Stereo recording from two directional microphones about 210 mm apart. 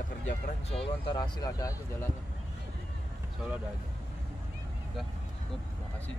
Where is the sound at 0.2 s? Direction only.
30° left (ahead or behind).